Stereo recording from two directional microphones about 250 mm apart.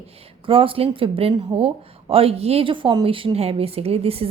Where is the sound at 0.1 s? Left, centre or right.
Right.